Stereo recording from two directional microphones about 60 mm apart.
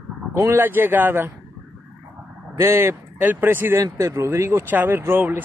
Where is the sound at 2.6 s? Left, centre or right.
Right.